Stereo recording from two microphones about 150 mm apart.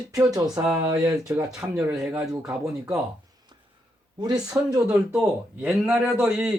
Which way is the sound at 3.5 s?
30° right (ahead or behind).